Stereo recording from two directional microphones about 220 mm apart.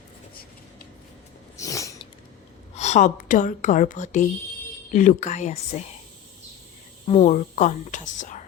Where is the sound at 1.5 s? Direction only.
15° left (ahead or behind).